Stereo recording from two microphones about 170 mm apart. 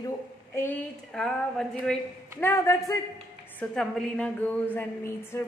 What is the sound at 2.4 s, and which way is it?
Speech, 15° left (ahead or behind).